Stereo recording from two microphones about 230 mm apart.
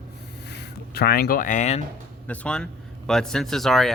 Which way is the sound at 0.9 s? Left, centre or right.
Left.